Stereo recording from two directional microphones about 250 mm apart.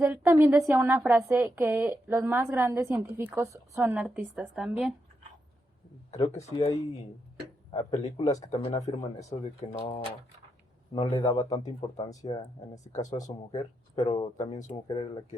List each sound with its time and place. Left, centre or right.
0.0 s a woman's voice: centre
6.1 s speech: left
7.7 s speech: left
12.0 s speech: left
12.6 s speech: centre